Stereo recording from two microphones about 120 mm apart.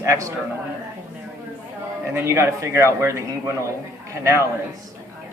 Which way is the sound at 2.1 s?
20° right (ahead or behind).